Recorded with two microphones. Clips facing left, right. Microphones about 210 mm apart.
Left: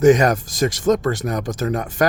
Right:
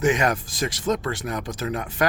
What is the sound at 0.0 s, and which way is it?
Speech, 40° left (ahead or behind).